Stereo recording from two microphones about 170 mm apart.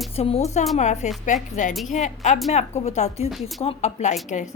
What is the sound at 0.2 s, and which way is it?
A woman's voice, 35° left (ahead or behind).